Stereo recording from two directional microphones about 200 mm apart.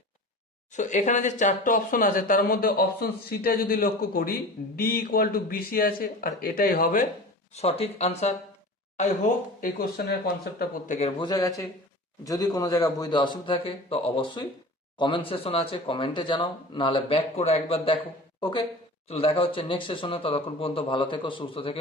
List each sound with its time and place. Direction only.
0.8 s speech: 35° left (ahead or behind)
7.5 s speech: 30° left (ahead or behind)
11.2 s a man's voice: 20° left (ahead or behind)
19.0 s speech: 30° left (ahead or behind)